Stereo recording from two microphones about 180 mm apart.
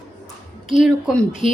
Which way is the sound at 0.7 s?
Centre (ahead or behind).